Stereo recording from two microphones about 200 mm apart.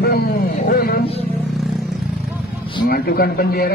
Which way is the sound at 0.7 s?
50° left (ahead or behind).